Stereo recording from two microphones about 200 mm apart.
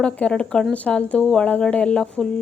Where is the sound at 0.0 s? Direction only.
5° left (ahead or behind).